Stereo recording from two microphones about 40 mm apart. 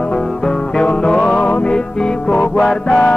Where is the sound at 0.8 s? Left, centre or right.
Left.